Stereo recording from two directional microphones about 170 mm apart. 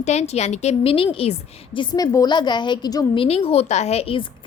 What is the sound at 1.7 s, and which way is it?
A woman's voice, 20° left (ahead or behind).